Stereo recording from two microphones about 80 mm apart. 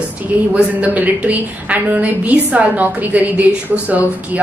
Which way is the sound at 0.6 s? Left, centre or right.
Centre.